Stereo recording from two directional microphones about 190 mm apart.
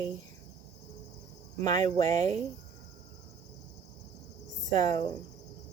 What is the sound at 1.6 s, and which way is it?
Cricket, 20° left (ahead or behind).